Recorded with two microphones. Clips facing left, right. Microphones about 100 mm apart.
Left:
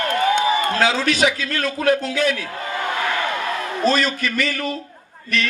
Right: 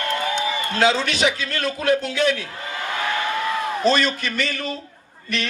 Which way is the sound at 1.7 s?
35° left (ahead or behind).